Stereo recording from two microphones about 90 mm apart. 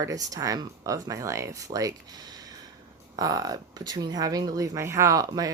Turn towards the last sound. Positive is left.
turn(degrees=-45)  # may be behind; listen again after turning